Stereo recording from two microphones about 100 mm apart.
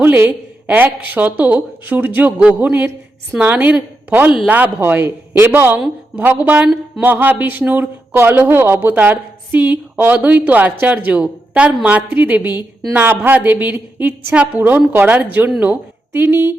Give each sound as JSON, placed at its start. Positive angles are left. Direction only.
{"t": 0.0, "sound": "a woman's voice", "side_deg": -20}